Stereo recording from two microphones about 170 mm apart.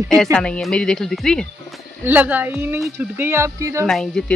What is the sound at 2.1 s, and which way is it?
Speech, 10° right (ahead or behind).